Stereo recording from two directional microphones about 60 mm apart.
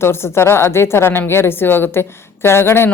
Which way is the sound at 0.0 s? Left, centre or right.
Left.